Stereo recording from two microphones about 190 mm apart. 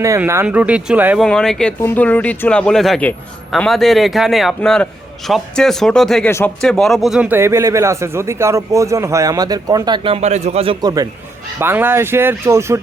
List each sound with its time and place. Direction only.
0.0 s speech: 15° right (ahead or behind)